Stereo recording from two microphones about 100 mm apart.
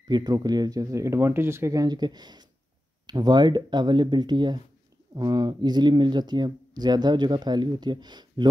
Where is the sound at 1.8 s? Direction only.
45° right (ahead or behind).